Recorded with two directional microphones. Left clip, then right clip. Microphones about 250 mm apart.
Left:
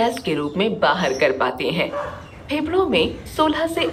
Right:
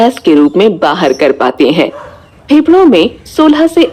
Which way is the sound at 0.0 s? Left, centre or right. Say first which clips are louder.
Right 14 dB; centre.